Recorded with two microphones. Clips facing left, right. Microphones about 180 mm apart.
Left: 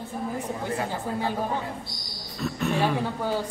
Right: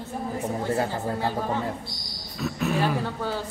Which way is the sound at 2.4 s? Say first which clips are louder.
Even; centre (ahead or behind).